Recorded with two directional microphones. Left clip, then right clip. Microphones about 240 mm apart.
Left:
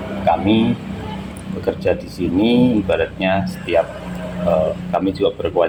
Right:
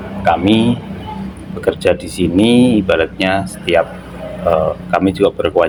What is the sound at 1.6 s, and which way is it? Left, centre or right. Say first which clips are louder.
Speech: right 5 dB; right.